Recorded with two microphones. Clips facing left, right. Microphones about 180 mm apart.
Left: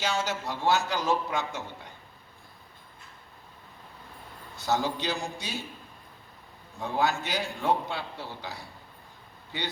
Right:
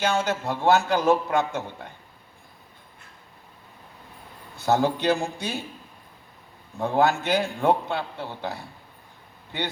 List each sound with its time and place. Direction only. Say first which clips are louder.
0.0 s a man's voice: right 6 dB; 55° right (ahead or behind)
4.5 s a man's voice: right 6 dB; 55° right (ahead or behind)
6.7 s a man's voice: right 6 dB; 55° right (ahead or behind)